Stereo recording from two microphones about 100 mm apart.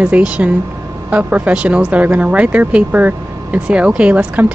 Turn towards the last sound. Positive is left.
turn(degrees=-10)  # may be behind; listen again after turning